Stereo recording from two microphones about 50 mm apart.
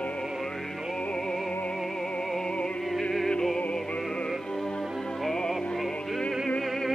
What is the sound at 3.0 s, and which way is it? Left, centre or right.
Music, centre.